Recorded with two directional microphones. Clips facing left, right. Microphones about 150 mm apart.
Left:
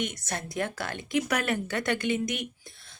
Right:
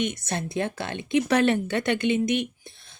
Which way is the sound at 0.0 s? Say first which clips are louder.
Right 5 dB; 25° right (ahead or behind).